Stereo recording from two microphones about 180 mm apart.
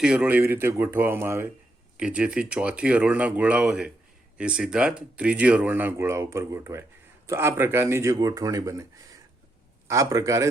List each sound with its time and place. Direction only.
0.0 s speech: 5° right (ahead or behind)